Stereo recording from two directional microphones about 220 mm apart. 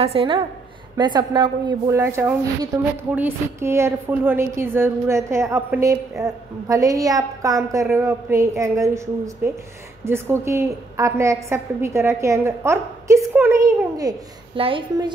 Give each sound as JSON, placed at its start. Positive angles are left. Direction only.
{"t": 0.0, "sound": "a woman's voice", "side_deg": -25}